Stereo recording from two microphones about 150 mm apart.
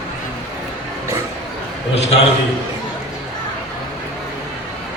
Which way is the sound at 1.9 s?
45° left (ahead or behind).